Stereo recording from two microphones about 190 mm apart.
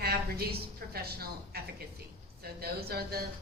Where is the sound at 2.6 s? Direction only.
55° right (ahead or behind).